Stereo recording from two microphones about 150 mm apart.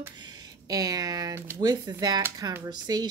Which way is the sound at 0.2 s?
25° right (ahead or behind).